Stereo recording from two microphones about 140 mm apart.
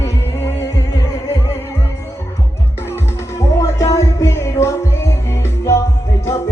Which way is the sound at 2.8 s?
20° left (ahead or behind).